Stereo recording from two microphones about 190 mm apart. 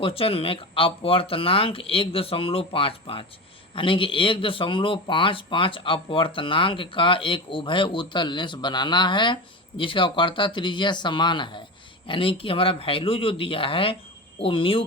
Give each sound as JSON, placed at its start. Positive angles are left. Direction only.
{"t": 0.0, "sound": "speech", "side_deg": 30}